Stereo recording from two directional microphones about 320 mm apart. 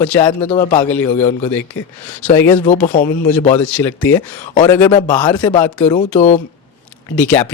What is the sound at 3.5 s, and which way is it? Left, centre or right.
Speech, centre.